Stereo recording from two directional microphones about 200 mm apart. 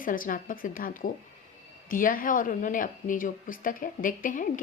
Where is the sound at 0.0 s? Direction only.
45° left (ahead or behind).